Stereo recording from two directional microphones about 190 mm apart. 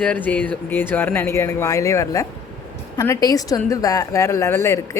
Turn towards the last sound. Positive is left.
turn(degrees=15)  # may be behind; listen again after turning